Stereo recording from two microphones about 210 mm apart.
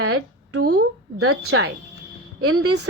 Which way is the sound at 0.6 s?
50° right (ahead or behind).